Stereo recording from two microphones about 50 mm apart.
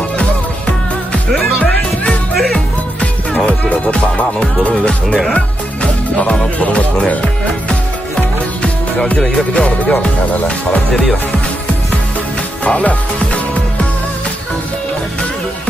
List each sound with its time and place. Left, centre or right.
3.0 s music: left
5.3 s speech: left
9.5 s music: left
12.6 s music: left